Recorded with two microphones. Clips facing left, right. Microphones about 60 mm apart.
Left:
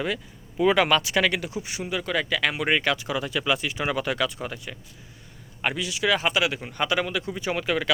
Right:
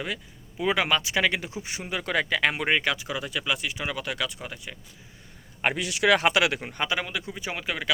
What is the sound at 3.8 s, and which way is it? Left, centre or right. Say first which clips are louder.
Speech: left 5 dB; left.